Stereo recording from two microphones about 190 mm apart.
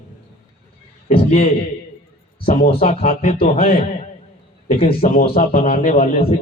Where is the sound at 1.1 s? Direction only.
35° left (ahead or behind).